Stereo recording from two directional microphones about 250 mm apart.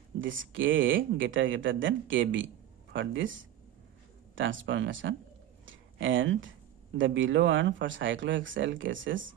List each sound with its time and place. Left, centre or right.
0.2 s speech: right
4.4 s speech: right
5.6 s a sound: right
7.0 s speech: right